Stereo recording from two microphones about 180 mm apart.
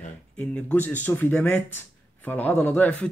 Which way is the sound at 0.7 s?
10° left (ahead or behind).